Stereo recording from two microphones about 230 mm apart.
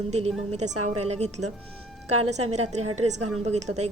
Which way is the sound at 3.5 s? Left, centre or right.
Right.